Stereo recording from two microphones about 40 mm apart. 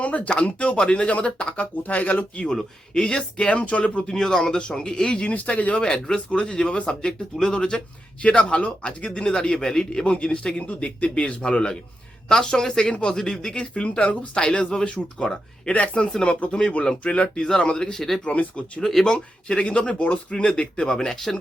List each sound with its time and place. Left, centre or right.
0.0 s speech: left
1.8 s speech: left
2.6 s speech: centre
3.5 s speech: left
4.1 s speech: centre; by 5.8 s left
5.8 s speech: centre
10.1 s speech: left
15.7 s speech: left
16.5 s speech: centre
18.3 s speech: left
18.8 s speech: centre
19.0 s speech: left